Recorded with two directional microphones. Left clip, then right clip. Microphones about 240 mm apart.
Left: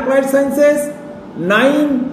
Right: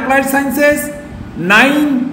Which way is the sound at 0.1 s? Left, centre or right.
Centre.